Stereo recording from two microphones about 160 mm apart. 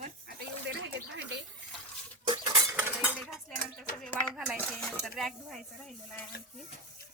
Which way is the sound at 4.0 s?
10° left (ahead or behind).